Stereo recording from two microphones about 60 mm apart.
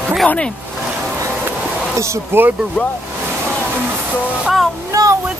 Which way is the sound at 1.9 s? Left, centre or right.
Right.